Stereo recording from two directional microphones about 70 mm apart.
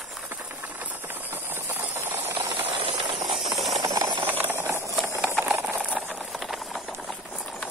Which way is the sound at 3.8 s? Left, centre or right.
Right.